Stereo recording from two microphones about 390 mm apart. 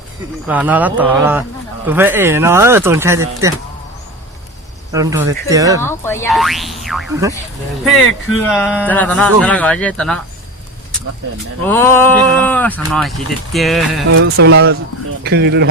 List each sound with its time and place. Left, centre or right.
0.4 s speech: centre
4.9 s speech: centre
5.8 s speech: centre
11.6 s speech: centre
14.1 s speech: right